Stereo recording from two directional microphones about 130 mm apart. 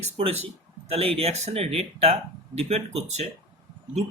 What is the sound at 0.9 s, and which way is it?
Speech, 50° right (ahead or behind).